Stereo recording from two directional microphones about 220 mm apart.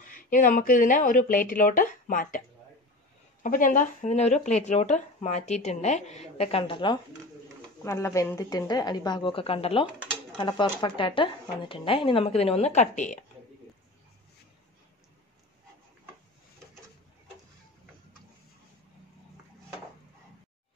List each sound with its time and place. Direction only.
0.1 s speech: 40° left (ahead or behind)
3.4 s a woman's voice: 35° left (ahead or behind)